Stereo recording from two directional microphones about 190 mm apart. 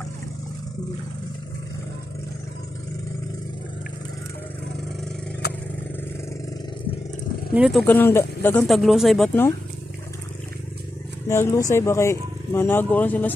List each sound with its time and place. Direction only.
5.4 s vehicle: 60° left (ahead or behind)
7.5 s speech: 5° right (ahead or behind)
7.8 s speech: 10° left (ahead or behind)
11.2 s speech: 15° left (ahead or behind)